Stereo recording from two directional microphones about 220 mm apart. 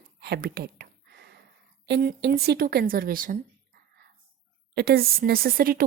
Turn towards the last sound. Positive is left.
turn(degrees=-40)  # may be behind; listen again after turning